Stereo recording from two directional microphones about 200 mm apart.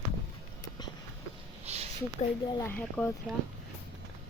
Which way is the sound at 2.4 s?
20° left (ahead or behind).